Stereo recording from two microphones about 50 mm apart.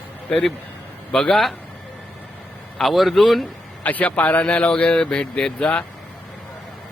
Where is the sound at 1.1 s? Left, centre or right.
Centre.